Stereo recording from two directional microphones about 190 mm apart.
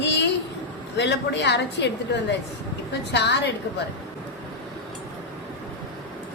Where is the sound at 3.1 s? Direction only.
65° left (ahead or behind).